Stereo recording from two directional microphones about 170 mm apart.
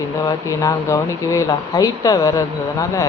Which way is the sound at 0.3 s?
20° left (ahead or behind).